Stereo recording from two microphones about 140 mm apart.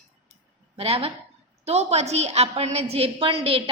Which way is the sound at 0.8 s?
45° right (ahead or behind).